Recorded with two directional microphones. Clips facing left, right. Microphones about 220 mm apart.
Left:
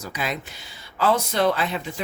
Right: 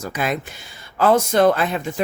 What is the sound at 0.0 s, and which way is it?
Speech, 50° right (ahead or behind).